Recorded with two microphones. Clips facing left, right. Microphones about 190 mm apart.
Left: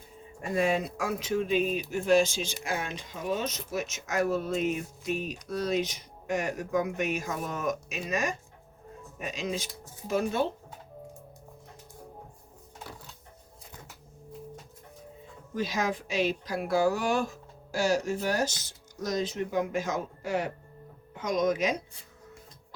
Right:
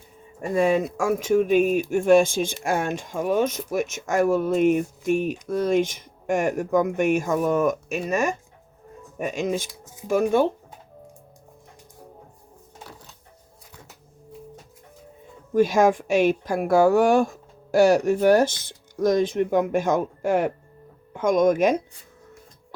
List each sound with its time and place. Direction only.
0.8 s speech: 50° right (ahead or behind)
15.5 s speech: 50° right (ahead or behind)